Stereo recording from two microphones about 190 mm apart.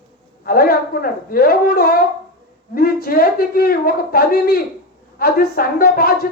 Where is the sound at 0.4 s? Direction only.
50° left (ahead or behind).